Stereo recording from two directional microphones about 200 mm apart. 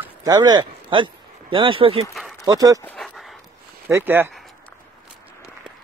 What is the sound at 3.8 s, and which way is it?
Speech, 10° right (ahead or behind).